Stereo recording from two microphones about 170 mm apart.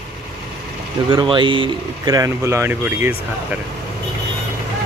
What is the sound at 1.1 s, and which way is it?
Speech, 30° right (ahead or behind).